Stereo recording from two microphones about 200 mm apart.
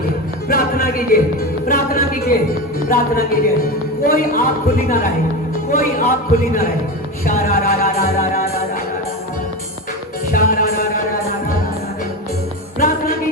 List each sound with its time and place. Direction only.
0.4 s music: 45° left (ahead or behind)
2.9 s a man's voice: 45° left (ahead or behind)
7.4 s music: 45° left (ahead or behind)
10.3 s music: 45° left (ahead or behind)